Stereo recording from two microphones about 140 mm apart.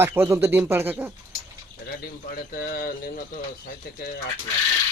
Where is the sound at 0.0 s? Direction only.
15° right (ahead or behind).